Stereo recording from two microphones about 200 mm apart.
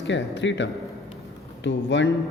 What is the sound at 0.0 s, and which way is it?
Mantra, 65° left (ahead or behind).